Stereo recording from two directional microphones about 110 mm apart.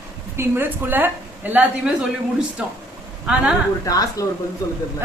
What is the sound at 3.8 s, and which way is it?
Speech, 35° left (ahead or behind).